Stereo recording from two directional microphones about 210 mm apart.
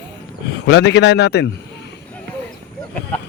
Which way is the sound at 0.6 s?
55° left (ahead or behind).